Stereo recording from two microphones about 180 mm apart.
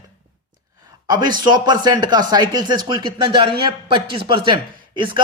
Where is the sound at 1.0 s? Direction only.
25° right (ahead or behind).